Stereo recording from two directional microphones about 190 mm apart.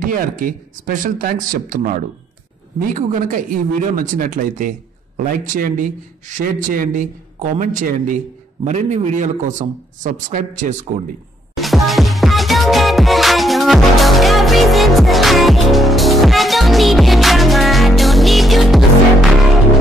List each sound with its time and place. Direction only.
0.0 s a man's voice: 50° right (ahead or behind)
11.5 s music: centre (ahead or behind)